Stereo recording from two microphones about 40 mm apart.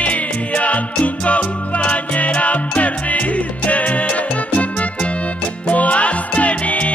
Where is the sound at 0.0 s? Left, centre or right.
Left.